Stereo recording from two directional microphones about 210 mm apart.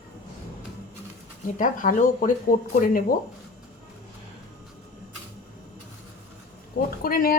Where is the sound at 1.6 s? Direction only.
40° left (ahead or behind).